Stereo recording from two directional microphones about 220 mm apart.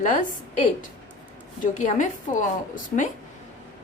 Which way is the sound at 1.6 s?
35° left (ahead or behind).